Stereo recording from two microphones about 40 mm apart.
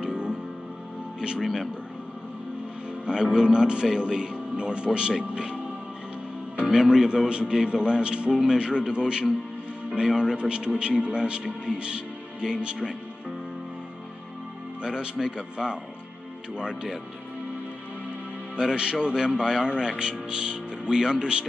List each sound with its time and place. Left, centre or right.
0.0 s music: right
1.4 s a man's voice: centre
3.1 s a man's voice: right
6.7 s a man's voice: centre
14.8 s a man's voice: right
18.6 s a man's voice: right